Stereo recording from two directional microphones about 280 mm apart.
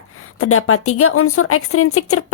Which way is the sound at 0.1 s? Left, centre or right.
Left.